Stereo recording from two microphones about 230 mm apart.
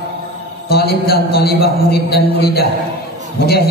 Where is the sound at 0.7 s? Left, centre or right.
Left.